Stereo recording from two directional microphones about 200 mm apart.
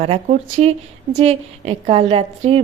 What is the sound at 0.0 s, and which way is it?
A woman's voice, 30° right (ahead or behind).